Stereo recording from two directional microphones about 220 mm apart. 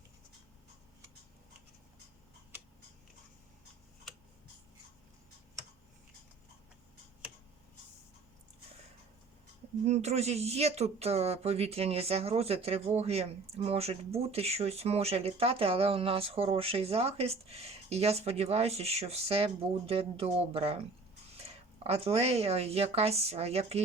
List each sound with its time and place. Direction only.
9.8 s speech: 30° right (ahead or behind)
21.8 s speech: 25° right (ahead or behind)